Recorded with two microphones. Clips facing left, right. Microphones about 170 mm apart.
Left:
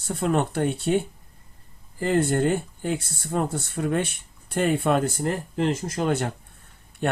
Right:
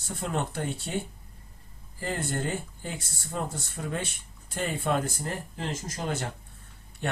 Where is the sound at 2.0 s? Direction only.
65° left (ahead or behind).